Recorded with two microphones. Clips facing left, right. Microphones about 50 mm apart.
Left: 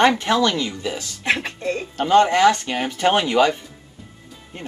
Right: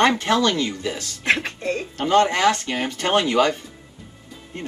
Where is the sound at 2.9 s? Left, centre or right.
Centre.